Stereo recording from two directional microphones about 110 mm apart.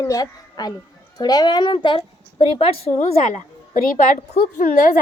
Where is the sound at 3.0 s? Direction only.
80° left.